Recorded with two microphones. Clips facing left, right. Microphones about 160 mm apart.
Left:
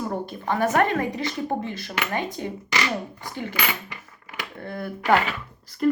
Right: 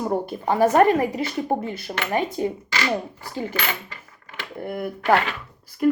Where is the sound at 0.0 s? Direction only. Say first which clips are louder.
Right 4 dB; 25° right (ahead or behind).